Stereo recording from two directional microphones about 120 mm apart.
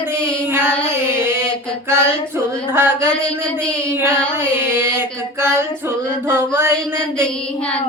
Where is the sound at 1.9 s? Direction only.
20° right (ahead or behind).